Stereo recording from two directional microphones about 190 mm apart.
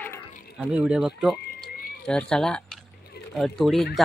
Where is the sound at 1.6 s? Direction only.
50° left (ahead or behind).